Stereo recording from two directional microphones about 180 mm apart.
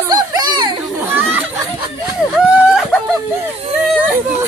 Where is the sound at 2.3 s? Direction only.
Centre (ahead or behind).